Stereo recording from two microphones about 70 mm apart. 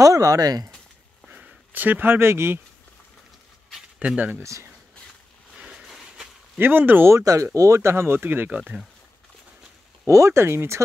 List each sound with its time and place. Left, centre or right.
0.0 s speech: right
1.3 s speech: right
4.0 s speech: centre
4.4 s speech: right
5.7 s a sound: centre
6.6 s speech: right
7.2 s speech: right
8.5 s speech: centre
10.0 s speech: right